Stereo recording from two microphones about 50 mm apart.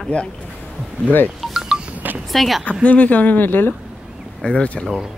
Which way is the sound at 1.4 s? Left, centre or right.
Centre.